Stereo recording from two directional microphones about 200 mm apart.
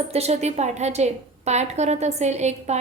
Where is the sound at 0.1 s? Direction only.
30° right (ahead or behind).